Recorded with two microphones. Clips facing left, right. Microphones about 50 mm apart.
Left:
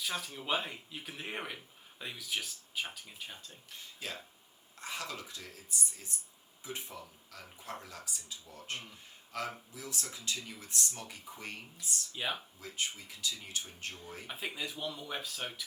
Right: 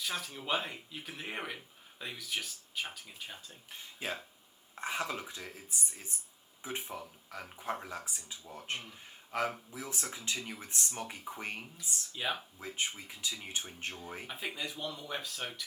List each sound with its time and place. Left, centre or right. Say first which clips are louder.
0.0 s speech: even; centre
3.7 s speech: right 4 dB; right
12.1 s speech: right 1 dB; centre
12.5 s speech: right 2 dB; right
14.3 s speech: left 1 dB; centre